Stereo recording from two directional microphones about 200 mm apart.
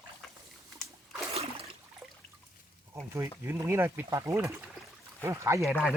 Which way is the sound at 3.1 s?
15° right (ahead or behind).